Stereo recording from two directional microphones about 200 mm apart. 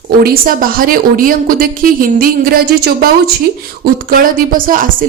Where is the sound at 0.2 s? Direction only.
50° right (ahead or behind).